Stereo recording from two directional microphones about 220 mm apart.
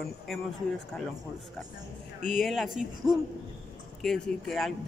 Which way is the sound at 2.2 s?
Centre (ahead or behind).